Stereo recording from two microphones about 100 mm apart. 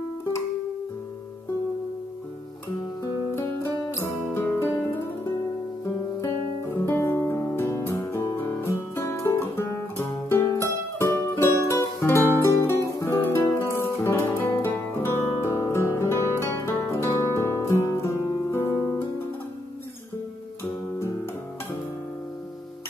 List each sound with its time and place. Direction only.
3.9 s music: 25° left (ahead or behind)
6.2 s music: 25° left (ahead or behind)